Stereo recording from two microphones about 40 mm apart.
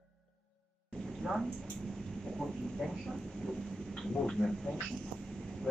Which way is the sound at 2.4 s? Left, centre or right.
Centre.